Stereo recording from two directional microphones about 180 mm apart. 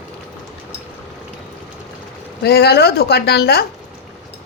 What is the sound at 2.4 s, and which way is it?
A woman's voice, 65° left (ahead or behind).